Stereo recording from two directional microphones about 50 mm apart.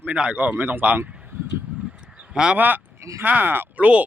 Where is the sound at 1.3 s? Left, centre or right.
Right.